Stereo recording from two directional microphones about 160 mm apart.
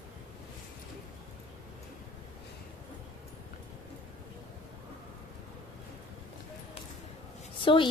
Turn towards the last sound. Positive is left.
turn(degrees=30)  # may be behind; listen again after turning